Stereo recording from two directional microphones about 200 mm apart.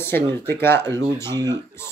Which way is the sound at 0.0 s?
10° left (ahead or behind).